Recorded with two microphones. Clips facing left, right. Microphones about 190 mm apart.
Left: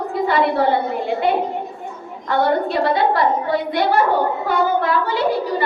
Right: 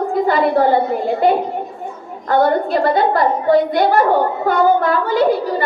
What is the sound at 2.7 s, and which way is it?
A woman's voice, 50° right (ahead or behind).